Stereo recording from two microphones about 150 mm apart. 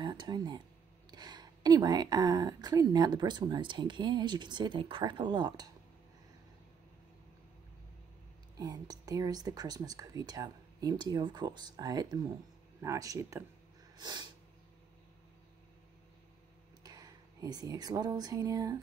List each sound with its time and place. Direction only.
0.0 s a woman's voice: 30° right (ahead or behind)
8.5 s a woman's voice: 25° right (ahead or behind)
16.8 s speech: 25° right (ahead or behind)